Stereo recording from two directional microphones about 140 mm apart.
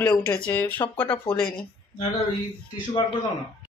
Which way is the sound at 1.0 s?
35° left (ahead or behind).